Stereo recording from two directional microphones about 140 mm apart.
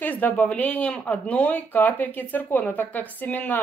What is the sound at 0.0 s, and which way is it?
Speech, 10° left (ahead or behind).